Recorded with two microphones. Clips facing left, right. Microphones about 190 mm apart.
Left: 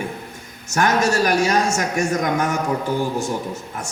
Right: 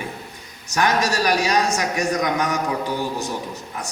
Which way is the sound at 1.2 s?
45° left (ahead or behind).